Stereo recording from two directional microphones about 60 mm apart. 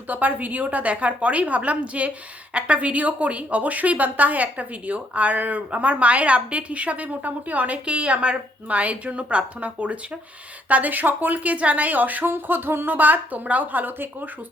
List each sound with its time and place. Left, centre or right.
0.1 s a woman's voice: right